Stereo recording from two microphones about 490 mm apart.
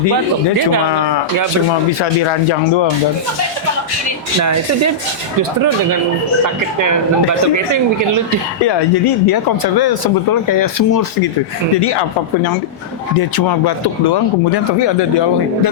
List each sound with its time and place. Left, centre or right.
2.0 s speech: left
6.4 s speech: right
8.6 s speech: left
11.8 s speech: left